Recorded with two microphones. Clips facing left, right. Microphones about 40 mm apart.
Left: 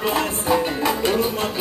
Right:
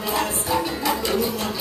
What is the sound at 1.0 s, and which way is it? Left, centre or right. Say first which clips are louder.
Speech: left 3 dB; left.